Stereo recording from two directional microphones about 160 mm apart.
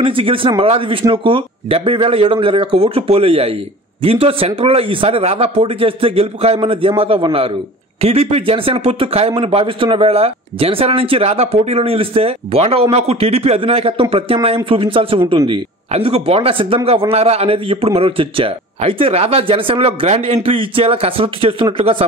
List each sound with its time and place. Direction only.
0.0 s a man's voice: 35° right (ahead or behind)